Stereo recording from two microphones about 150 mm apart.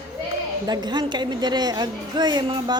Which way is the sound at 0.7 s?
30° right (ahead or behind).